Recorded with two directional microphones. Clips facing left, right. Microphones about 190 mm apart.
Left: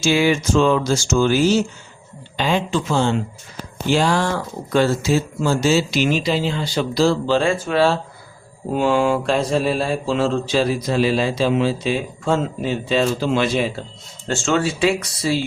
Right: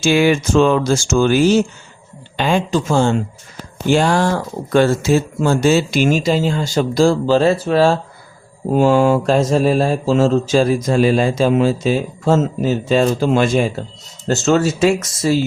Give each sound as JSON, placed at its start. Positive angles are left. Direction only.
{"t": 0.0, "sound": "speech", "side_deg": -55}
{"t": 2.3, "sound": "mantra", "side_deg": -50}